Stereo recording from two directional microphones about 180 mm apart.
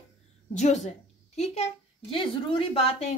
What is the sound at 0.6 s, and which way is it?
A woman's voice, 40° left (ahead or behind).